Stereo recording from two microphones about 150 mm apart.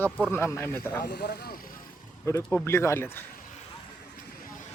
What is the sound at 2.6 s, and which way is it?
Speech, 15° left (ahead or behind).